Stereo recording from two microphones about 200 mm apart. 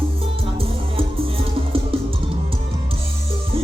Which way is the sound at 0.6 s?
25° right (ahead or behind).